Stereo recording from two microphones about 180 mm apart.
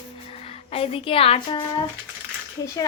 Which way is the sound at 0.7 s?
30° left (ahead or behind).